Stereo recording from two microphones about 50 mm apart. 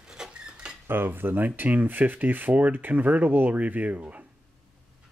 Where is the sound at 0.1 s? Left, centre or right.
Centre.